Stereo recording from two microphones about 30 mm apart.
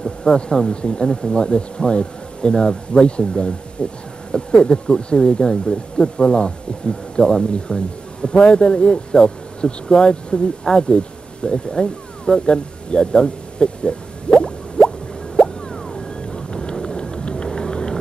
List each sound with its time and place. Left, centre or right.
0.3 s speech: left
3.0 s speech: left
10.7 s a sound: left
15.7 s a sound: centre
16.8 s music: left
17.5 s vehicle: left